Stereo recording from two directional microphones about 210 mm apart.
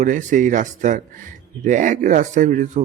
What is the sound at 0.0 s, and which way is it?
Speech, 35° right (ahead or behind).